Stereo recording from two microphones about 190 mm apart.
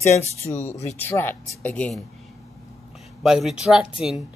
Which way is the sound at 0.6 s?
35° left (ahead or behind).